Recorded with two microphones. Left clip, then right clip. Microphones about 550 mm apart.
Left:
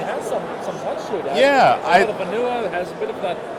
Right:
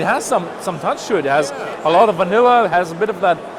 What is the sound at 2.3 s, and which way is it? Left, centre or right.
Speech, right.